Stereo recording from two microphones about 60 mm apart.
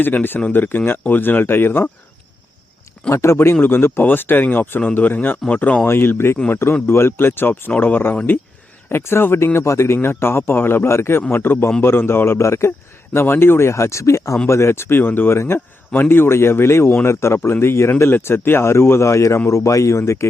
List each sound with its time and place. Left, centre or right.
0.0 s speech: left
3.1 s speech: left
8.1 s speech: left
8.9 s speech: left
13.1 s speech: left